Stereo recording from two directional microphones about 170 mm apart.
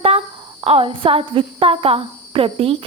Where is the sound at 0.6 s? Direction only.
35° right (ahead or behind).